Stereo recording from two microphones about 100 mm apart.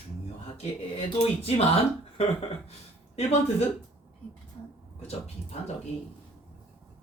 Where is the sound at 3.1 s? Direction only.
90° left.